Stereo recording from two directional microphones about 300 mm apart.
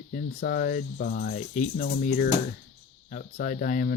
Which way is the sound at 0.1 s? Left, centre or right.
Left.